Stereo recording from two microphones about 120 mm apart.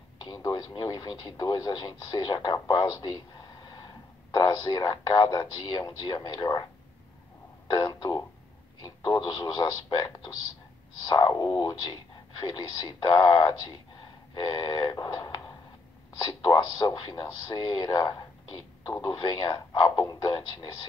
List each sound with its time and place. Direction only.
0.2 s speech: 35° left (ahead or behind)
7.7 s speech: 30° left (ahead or behind)